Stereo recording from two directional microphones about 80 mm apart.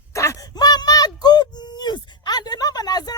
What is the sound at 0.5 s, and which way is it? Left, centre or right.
Speech, left.